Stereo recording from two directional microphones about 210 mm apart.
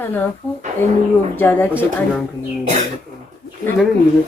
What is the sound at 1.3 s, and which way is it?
Speech, 10° left (ahead or behind).